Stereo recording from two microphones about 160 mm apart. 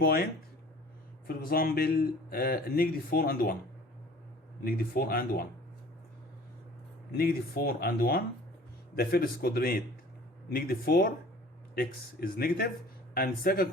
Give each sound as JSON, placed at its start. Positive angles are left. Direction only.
{"t": 0.0, "sound": "a man's voice", "side_deg": 70}
{"t": 1.3, "sound": "a man's voice", "side_deg": 70}
{"t": 4.6, "sound": "a man's voice", "side_deg": 70}
{"t": 7.2, "sound": "a man's voice", "side_deg": 70}